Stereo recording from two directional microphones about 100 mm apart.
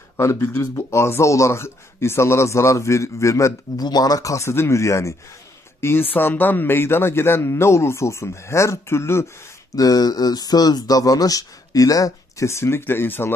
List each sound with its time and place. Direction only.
0.2 s speech: 30° left (ahead or behind)
9.8 s speech: 40° left (ahead or behind); by 13.3 s 25° left (ahead or behind)